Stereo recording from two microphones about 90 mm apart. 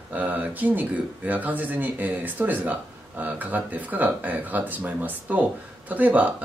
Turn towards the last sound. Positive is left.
turn(degrees=-15)  # may be behind; listen again after turning